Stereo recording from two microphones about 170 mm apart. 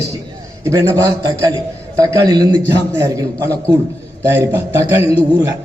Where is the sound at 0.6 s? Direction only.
20° right (ahead or behind).